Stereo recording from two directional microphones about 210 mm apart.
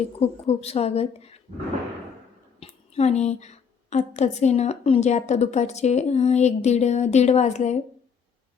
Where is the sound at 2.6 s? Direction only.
30° left (ahead or behind).